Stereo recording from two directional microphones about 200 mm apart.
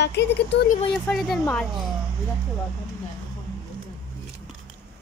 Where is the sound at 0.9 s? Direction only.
Centre (ahead or behind).